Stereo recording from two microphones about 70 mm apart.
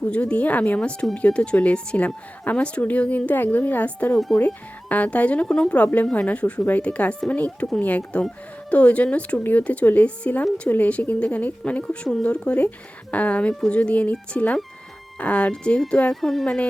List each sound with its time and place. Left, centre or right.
0.1 s a woman's voice: centre
13.5 s speech: centre
13.7 s a woman's voice: centre
16.2 s speech: centre